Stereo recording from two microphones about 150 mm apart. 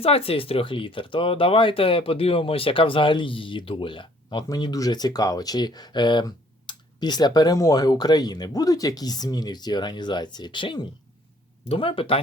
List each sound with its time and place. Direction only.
0.0 s speech: 40° left (ahead or behind)